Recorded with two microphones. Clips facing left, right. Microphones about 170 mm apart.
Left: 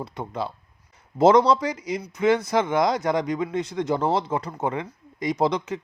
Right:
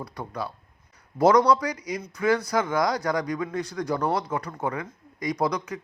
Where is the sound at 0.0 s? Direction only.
25° left (ahead or behind).